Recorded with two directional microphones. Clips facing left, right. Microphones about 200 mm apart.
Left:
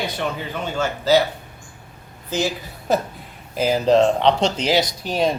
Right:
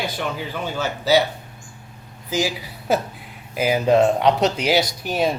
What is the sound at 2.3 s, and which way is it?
A woman's voice, 10° right (ahead or behind).